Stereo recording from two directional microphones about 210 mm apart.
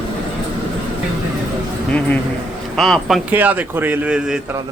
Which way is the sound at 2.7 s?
Centre (ahead or behind).